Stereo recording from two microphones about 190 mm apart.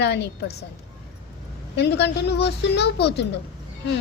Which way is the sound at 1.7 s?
65° left (ahead or behind).